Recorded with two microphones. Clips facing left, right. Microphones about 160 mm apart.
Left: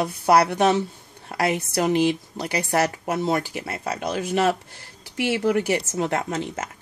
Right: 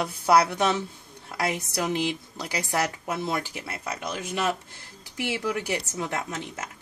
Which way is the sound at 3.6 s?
65° left (ahead or behind).